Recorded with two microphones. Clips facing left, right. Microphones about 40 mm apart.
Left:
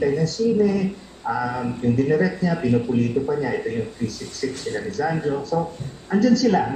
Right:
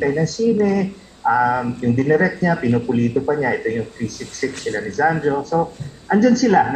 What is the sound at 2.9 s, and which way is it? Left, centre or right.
Speech, right.